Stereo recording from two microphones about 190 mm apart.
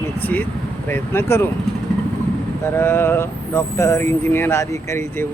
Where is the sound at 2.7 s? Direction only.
10° left (ahead or behind).